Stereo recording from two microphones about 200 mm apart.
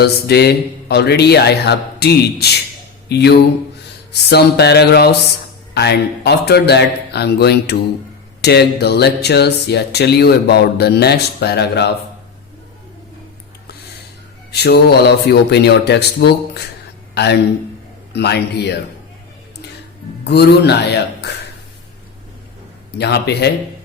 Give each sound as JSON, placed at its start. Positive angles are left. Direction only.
{"t": 0.0, "sound": "speech", "side_deg": 55}
{"t": 3.1, "sound": "mantra", "side_deg": 55}
{"t": 5.7, "sound": "speech", "side_deg": 55}
{"t": 14.5, "sound": "speech", "side_deg": 55}
{"t": 20.2, "sound": "speech", "side_deg": 55}
{"t": 23.0, "sound": "speech", "side_deg": 55}